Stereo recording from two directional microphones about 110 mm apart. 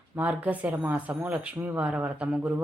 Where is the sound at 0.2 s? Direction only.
15° right (ahead or behind).